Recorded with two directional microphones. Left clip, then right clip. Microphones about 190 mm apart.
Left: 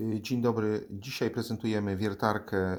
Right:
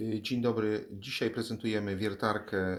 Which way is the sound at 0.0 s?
55° left (ahead or behind).